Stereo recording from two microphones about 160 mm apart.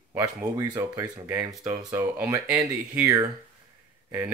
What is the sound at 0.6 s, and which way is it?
Speech, 20° right (ahead or behind).